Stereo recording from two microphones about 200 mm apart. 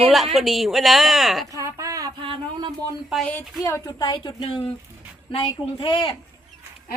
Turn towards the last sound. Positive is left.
turn(degrees=25)  # may be behind; listen again after turning